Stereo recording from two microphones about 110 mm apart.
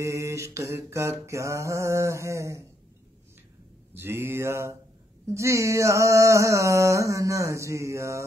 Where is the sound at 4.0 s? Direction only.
20° right (ahead or behind).